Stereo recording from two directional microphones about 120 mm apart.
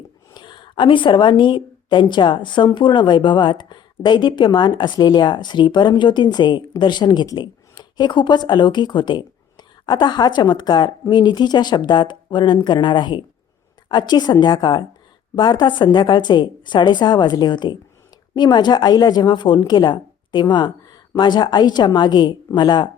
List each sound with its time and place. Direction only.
0.3 s a woman's voice: 40° left (ahead or behind)